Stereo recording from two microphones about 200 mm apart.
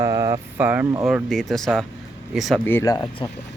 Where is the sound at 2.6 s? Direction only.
15° left (ahead or behind).